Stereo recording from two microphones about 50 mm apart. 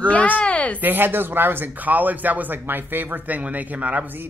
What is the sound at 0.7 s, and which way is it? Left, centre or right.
Speech, right.